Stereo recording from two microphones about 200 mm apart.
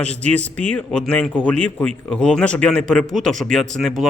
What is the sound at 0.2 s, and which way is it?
A man's voice, 5° left (ahead or behind).